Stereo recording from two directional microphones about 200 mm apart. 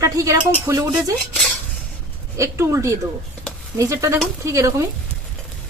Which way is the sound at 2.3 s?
15° right (ahead or behind).